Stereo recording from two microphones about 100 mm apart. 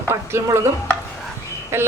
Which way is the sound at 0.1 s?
30° right (ahead or behind).